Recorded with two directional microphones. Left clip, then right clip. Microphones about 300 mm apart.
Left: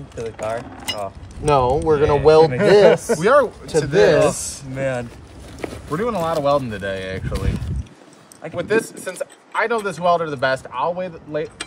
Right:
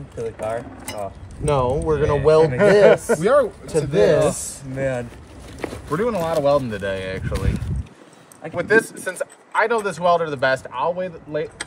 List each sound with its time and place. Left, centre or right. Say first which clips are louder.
0.1 s speech: even; centre
1.4 s speech: left 4 dB; left
2.5 s speech: left 1 dB; centre
3.2 s speech: left 2 dB; centre
4.3 s speech: left 1 dB; centre
4.7 s speech: left 1 dB; centre
5.6 s speech: right 1 dB; centre